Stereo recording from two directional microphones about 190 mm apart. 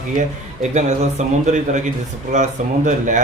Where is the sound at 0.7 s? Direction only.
40° right (ahead or behind).